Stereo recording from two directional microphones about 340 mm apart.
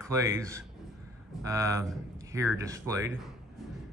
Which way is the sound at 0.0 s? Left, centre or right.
Centre.